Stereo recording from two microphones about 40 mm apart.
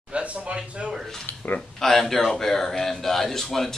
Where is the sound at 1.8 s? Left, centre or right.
Centre.